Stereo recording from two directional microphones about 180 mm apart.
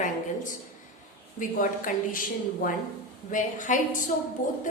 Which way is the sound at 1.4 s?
50° left (ahead or behind).